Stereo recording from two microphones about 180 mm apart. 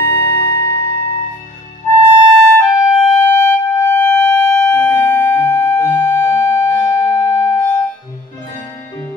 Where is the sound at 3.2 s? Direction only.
15° left (ahead or behind).